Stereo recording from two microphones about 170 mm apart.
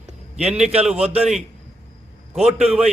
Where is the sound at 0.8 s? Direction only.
5° right (ahead or behind).